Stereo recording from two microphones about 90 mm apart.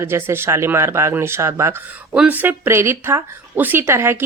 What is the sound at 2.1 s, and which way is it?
Speech, 15° right (ahead or behind).